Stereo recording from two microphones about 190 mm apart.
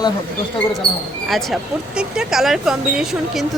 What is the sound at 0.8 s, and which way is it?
Speech, 50° right (ahead or behind).